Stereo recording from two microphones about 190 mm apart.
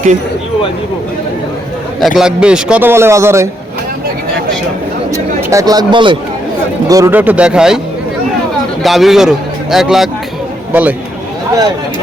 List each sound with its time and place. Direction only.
2.0 s a man's voice: centre (ahead or behind)
5.1 s a man's voice: 15° right (ahead or behind)
8.8 s a man's voice: centre (ahead or behind)